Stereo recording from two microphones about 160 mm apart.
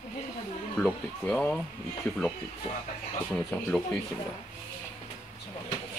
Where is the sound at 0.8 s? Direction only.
5° left (ahead or behind).